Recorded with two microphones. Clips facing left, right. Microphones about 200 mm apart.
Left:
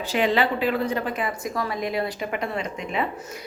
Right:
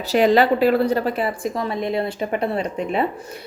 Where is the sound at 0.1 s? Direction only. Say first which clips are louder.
Right 7 dB; 40° right (ahead or behind).